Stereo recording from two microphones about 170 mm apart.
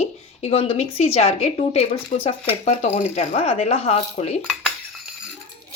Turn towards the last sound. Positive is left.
turn(degrees=-5)  # may be behind; listen again after turning